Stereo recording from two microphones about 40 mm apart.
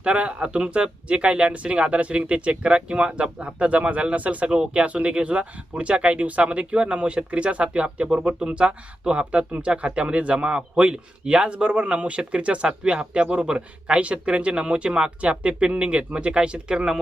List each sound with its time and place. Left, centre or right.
0.0 s a man's voice: right
15.3 s a man's voice: right; by 17.0 s centre